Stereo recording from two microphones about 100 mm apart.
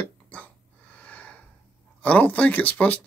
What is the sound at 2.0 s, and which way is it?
Speech, 15° left (ahead or behind).